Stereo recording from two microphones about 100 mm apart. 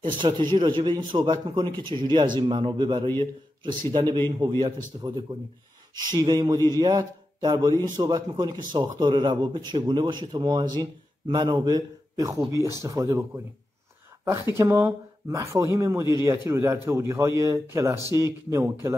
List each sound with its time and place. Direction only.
0.2 s a man's voice: 50° right (ahead or behind); by 13.2 s 35° right (ahead or behind)
14.2 s speech: 30° right (ahead or behind)